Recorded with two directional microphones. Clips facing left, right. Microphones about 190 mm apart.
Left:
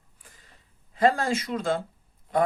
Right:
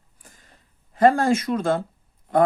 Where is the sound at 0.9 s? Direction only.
50° right (ahead or behind).